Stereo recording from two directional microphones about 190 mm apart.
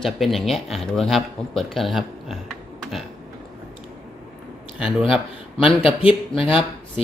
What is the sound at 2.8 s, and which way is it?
Typing, centre (ahead or behind).